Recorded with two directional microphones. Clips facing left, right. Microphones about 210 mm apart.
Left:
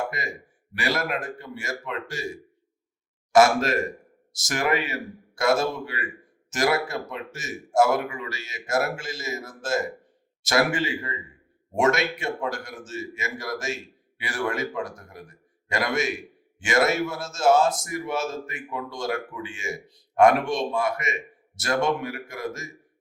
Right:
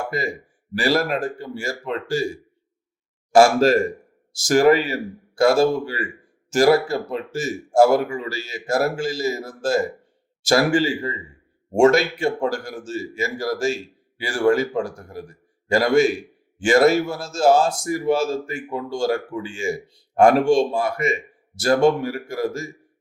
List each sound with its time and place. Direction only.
0.1 s a man's voice: 30° right (ahead or behind)